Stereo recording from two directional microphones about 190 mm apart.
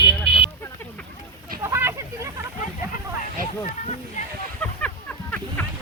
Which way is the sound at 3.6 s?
40° left (ahead or behind).